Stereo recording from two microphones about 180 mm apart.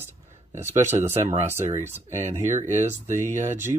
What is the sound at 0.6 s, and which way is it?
Speech, 15° right (ahead or behind).